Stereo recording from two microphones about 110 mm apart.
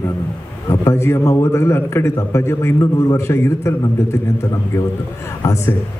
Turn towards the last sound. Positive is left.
turn(degrees=30)  # may be behind; listen again after turning